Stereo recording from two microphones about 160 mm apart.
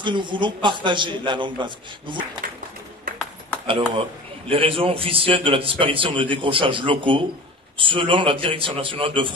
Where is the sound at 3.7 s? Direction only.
35° right (ahead or behind).